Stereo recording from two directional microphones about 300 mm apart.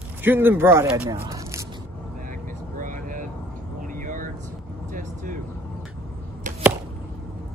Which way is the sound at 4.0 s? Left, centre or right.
Right.